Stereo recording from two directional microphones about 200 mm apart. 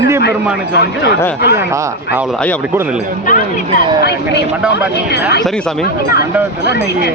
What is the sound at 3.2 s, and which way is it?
Speech, 40° left (ahead or behind).